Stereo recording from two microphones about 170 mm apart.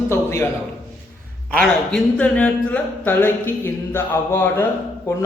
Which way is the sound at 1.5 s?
5° left (ahead or behind).